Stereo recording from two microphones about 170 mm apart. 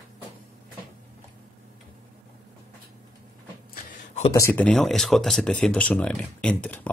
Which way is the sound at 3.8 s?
40° left (ahead or behind).